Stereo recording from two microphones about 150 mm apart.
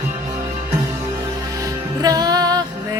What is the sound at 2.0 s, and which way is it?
Music, 25° right (ahead or behind).